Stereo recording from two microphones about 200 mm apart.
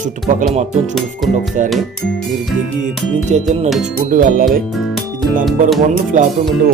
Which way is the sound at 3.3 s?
35° right (ahead or behind).